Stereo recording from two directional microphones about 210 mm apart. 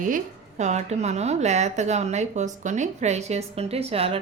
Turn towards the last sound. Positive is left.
turn(degrees=-30)  # may be behind; listen again after turning